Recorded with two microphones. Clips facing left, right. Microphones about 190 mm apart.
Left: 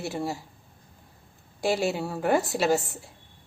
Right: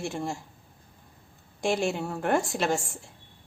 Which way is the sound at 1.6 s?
5° left (ahead or behind).